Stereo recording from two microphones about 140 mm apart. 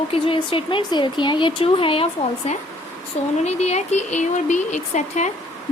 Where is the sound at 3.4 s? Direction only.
50° left (ahead or behind).